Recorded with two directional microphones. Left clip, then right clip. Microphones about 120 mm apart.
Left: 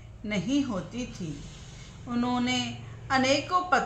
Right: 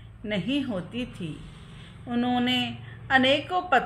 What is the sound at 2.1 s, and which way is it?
Speech, 45° left (ahead or behind).